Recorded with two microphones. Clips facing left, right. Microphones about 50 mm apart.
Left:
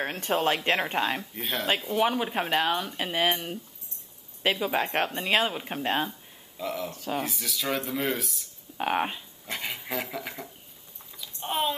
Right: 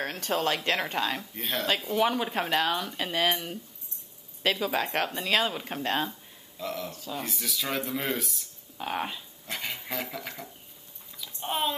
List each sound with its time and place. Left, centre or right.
0.0 s speech: left
1.3 s speech: centre
8.7 s speech: left
9.5 s speech: centre
11.1 s typing: centre